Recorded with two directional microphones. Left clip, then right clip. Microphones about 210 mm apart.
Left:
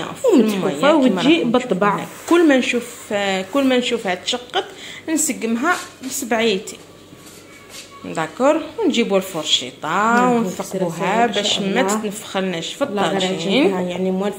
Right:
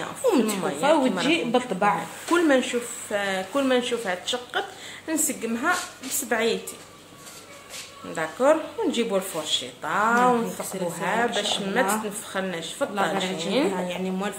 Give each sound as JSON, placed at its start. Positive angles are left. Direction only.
{"t": 0.3, "sound": "speech", "side_deg": -5}
{"t": 8.1, "sound": "speech", "side_deg": 5}